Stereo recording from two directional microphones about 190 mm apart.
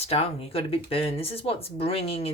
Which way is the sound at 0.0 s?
30° left (ahead or behind).